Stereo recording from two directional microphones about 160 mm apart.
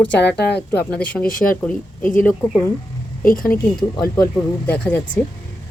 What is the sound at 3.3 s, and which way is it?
Speech, 65° left (ahead or behind).